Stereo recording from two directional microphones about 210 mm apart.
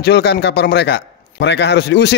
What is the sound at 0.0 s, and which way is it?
Speech, 55° left (ahead or behind).